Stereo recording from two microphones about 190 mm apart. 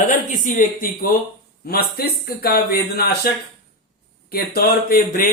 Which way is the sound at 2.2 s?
55° left (ahead or behind).